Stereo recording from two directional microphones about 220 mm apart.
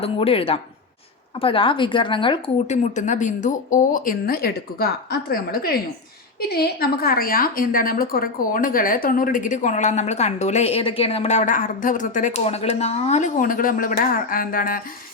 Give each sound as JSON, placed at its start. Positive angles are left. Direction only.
{"t": 0.0, "sound": "a woman's voice", "side_deg": 25}